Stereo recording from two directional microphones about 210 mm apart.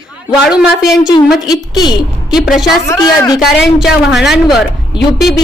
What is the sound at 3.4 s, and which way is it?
A woman's voice, centre (ahead or behind).